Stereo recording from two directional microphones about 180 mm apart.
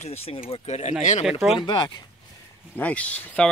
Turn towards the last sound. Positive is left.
turn(degrees=5)  # may be behind; listen again after turning